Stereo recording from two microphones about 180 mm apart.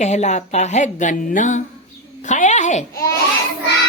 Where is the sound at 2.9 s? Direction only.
20° left (ahead or behind).